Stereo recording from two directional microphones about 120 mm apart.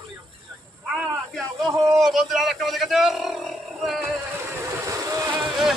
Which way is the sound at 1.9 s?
5° right (ahead or behind).